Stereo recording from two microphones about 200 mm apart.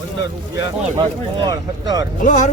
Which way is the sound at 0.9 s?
20° right (ahead or behind).